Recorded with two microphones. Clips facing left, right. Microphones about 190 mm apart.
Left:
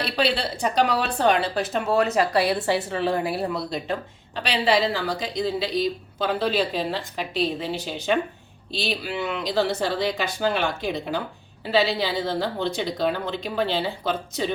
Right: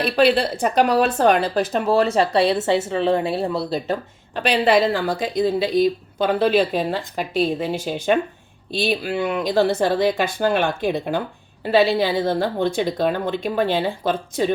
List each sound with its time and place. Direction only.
0.0 s speech: 50° right (ahead or behind)
1.7 s a woman's voice: 30° right (ahead or behind)
4.4 s speech: 55° right (ahead or behind)